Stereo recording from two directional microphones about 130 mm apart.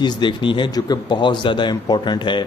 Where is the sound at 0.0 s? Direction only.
35° left (ahead or behind).